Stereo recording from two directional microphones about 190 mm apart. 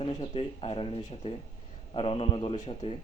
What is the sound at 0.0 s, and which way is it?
Speech, 30° left (ahead or behind).